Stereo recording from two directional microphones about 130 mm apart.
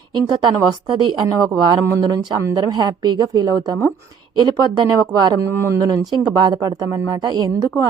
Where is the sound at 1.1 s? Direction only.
30° right (ahead or behind).